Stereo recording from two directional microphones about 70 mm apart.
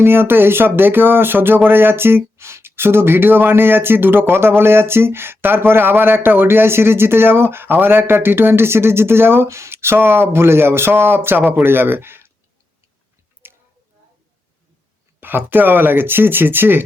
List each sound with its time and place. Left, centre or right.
0.0 s speech: right
13.4 s a sound: right
15.2 s speech: right